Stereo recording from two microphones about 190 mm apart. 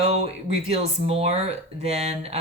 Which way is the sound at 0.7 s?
30° right (ahead or behind).